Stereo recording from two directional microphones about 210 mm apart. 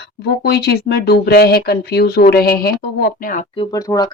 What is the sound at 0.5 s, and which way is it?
Speech, 50° left (ahead or behind).